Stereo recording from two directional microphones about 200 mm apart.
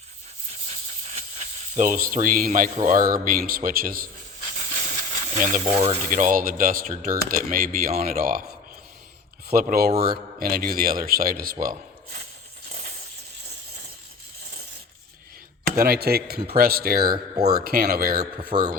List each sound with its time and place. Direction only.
0.7 s speech: 35° right (ahead or behind)
4.5 s a sound: 40° right (ahead or behind)
5.6 s speech: 30° right (ahead or behind); by 8.4 s 45° right (ahead or behind)
9.5 s speech: 45° right (ahead or behind)
11.6 s a sound: 40° right (ahead or behind)
15.8 s speech: 50° right (ahead or behind)